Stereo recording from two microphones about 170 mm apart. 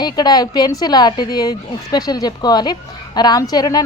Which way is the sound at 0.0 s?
25° left (ahead or behind).